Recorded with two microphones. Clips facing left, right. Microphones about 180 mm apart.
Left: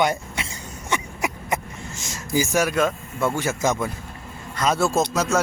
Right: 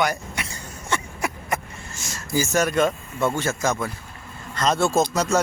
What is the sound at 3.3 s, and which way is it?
Speech, 15° left (ahead or behind).